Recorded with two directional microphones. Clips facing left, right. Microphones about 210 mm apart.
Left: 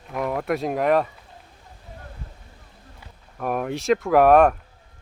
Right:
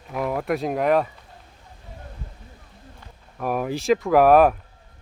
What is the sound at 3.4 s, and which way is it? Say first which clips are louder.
Speech: right 1 dB; centre (ahead or behind).